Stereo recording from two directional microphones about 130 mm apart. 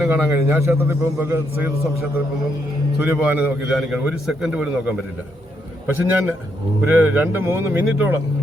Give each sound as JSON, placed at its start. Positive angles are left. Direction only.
{"t": 0.0, "sound": "a man's voice", "side_deg": -20}
{"t": 3.7, "sound": "a man's voice", "side_deg": -5}
{"t": 6.1, "sound": "a man's voice", "side_deg": -15}